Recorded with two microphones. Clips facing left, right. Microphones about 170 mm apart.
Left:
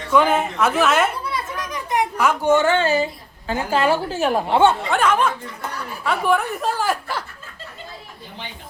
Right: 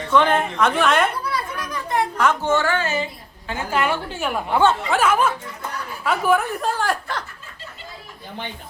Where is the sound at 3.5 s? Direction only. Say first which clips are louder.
Left 4 dB; 30° left (ahead or behind).